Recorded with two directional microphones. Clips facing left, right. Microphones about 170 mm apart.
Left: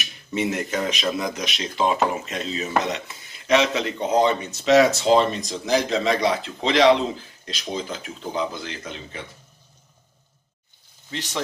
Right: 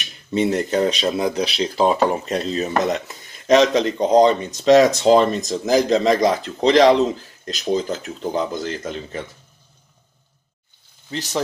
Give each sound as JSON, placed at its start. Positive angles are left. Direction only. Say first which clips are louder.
{"t": 0.0, "sound": "a man's voice", "louder": "right 5 dB", "side_deg": -35}
{"t": 11.1, "sound": "a man's voice", "louder": "right 5 dB", "side_deg": -40}